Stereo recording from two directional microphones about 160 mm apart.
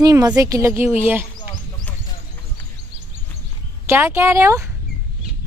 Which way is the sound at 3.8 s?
15° right (ahead or behind).